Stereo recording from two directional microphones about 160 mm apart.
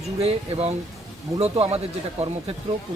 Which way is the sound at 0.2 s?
40° right (ahead or behind).